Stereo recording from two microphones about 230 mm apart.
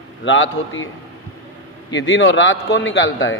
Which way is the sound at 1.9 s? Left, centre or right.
Left.